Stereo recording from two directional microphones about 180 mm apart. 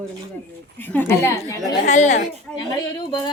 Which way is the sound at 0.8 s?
10° left (ahead or behind).